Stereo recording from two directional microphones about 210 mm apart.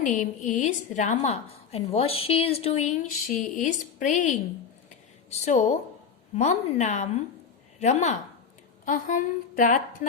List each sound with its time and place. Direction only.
0.0 s a woman's voice: 35° left (ahead or behind)